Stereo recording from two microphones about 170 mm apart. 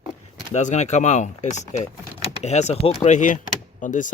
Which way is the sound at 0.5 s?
45° left (ahead or behind).